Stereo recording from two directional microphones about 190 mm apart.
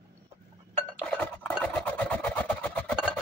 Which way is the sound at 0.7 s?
5° left (ahead or behind).